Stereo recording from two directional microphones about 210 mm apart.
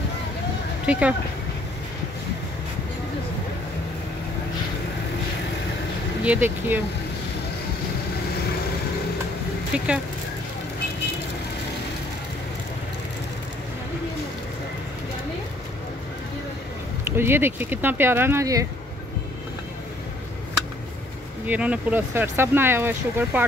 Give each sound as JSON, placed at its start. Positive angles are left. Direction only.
{"t": 0.8, "sound": "speech", "side_deg": -5}
{"t": 6.2, "sound": "speech", "side_deg": -10}
{"t": 9.7, "sound": "speech", "side_deg": -5}
{"t": 17.0, "sound": "speech", "side_deg": -10}
{"t": 21.5, "sound": "speech", "side_deg": -5}